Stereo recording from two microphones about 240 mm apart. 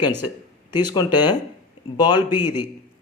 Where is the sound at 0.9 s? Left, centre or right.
Centre.